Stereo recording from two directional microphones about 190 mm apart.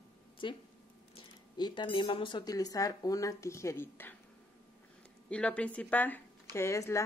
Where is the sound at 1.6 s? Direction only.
25° left (ahead or behind).